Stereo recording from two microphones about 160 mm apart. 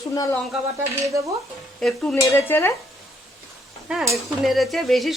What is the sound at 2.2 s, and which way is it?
Speech, 15° left (ahead or behind).